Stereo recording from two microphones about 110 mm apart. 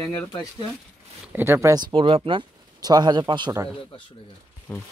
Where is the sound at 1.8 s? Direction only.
50° right (ahead or behind).